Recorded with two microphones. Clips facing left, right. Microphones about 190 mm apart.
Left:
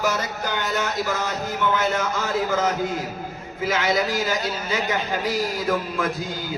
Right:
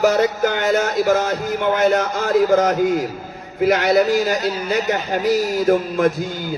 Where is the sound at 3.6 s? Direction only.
60° right (ahead or behind).